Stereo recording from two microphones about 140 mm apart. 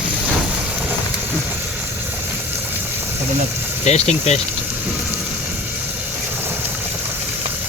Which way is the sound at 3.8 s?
50° left (ahead or behind).